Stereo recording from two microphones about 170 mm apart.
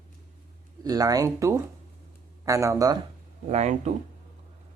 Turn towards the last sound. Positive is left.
turn(degrees=-40)  # may be behind; listen again after turning